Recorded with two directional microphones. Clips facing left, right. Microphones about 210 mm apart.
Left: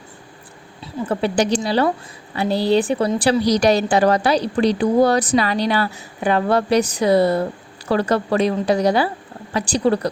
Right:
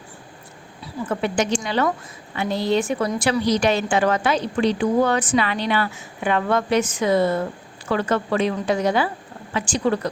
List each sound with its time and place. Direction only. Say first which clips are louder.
1.0 s a woman's voice: left 3 dB; 35° left (ahead or behind)